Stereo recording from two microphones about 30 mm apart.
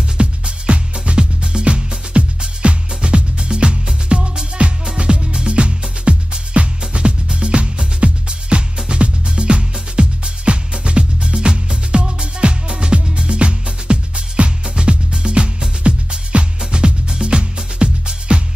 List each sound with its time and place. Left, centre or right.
0.2 s music: right